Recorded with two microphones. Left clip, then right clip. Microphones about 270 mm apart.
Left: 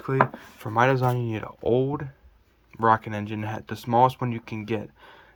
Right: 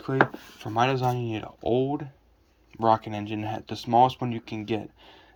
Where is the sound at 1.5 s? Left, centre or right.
Left.